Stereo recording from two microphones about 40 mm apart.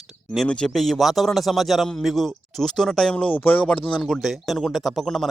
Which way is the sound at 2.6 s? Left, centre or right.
Centre.